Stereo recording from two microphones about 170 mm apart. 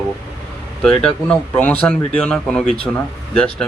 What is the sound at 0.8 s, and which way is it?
Speech, 5° left (ahead or behind).